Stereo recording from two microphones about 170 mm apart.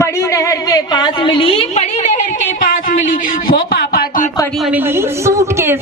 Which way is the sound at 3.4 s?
60° left (ahead or behind).